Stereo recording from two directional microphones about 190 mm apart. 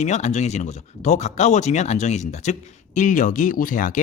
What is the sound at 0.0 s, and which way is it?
Speech, 35° left (ahead or behind).